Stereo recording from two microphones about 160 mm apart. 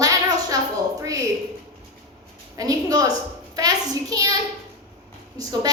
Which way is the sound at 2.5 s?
25° right (ahead or behind).